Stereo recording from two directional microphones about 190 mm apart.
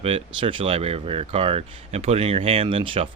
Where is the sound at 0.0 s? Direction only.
30° right (ahead or behind).